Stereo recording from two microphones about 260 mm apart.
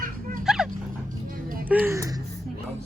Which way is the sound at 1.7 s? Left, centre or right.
Centre.